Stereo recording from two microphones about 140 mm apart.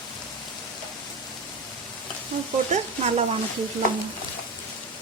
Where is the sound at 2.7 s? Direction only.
50° right (ahead or behind).